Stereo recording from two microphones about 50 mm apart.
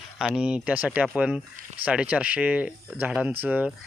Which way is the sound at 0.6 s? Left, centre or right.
Right.